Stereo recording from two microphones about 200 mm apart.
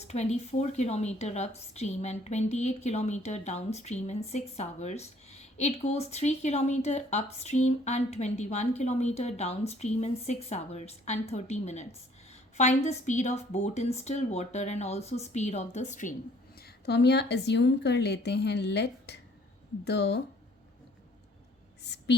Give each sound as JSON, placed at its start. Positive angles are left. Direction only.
{"t": 0.0, "sound": "a woman's voice", "side_deg": 35}
{"t": 16.6, "sound": "a woman's voice", "side_deg": 55}
{"t": 21.8, "sound": "speech", "side_deg": 55}